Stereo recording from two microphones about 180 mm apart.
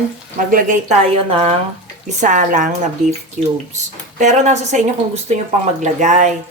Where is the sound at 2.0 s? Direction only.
45° right (ahead or behind).